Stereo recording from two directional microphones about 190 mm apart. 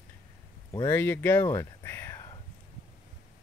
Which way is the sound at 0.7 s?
15° left (ahead or behind).